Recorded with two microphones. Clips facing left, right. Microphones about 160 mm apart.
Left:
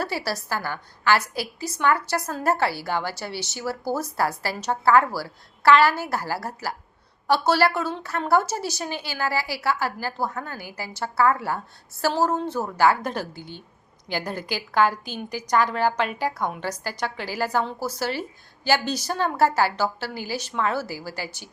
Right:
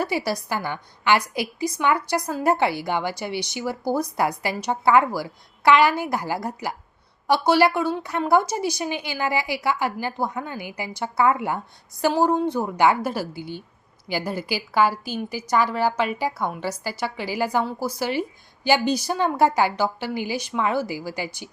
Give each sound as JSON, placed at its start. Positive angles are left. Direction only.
{"t": 0.0, "sound": "a woman's voice", "side_deg": -15}
{"t": 13.0, "sound": "a woman's voice", "side_deg": -5}